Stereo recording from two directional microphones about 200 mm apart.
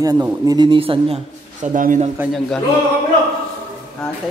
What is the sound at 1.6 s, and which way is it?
Speech, 40° right (ahead or behind).